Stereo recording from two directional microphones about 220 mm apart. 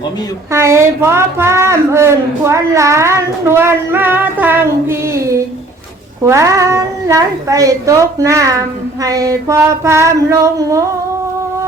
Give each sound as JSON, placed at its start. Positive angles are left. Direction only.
{"t": 0.5, "sound": "a woman's voice", "side_deg": -10}